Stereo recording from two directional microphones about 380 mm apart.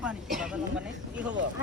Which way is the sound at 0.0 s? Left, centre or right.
Centre.